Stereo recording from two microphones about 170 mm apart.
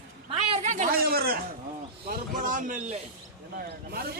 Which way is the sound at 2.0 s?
50° right (ahead or behind).